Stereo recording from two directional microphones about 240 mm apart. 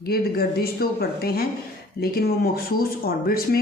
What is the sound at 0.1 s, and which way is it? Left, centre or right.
A woman's voice, left.